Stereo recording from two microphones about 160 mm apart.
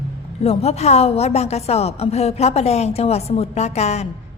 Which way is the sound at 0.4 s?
40° left (ahead or behind).